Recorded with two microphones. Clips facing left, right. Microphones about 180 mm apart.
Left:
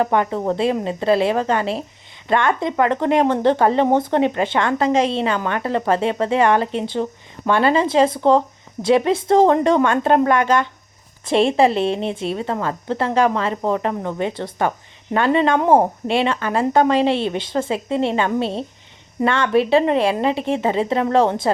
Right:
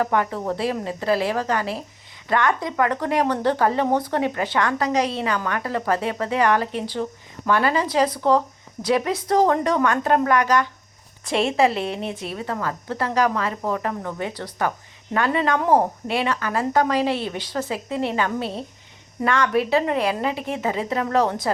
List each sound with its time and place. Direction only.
0.0 s speech: 20° left (ahead or behind)